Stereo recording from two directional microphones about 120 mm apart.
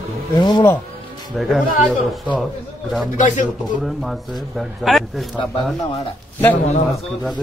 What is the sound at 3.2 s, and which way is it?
Speech, 90° left.